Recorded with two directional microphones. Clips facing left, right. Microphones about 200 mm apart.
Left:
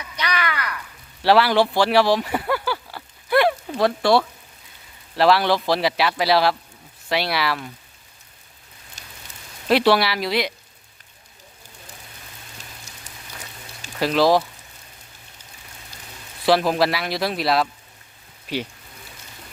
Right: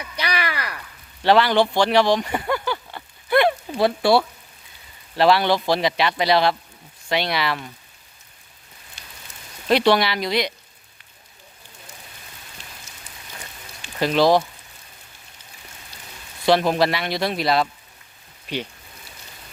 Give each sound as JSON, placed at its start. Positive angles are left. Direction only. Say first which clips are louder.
{"t": 0.2, "sound": "a sound", "louder": "even", "side_deg": -30}
{"t": 1.2, "sound": "a sound", "louder": "even", "side_deg": 5}
{"t": 3.7, "sound": "speech", "louder": "even", "side_deg": -5}
{"t": 9.0, "sound": "rain on surface", "louder": "left 1 dB", "side_deg": 45}
{"t": 9.6, "sound": "speech", "louder": "even", "side_deg": 5}
{"t": 13.1, "sound": "rain on surface", "louder": "left 1 dB", "side_deg": 40}
{"t": 14.0, "sound": "speech", "louder": "even", "side_deg": 0}
{"t": 16.5, "sound": "speech", "louder": "even", "side_deg": 0}